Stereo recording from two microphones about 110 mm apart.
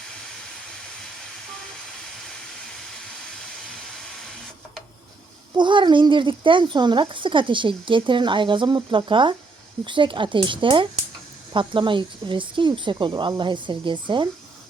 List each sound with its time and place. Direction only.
5.5 s speech: 45° right (ahead or behind)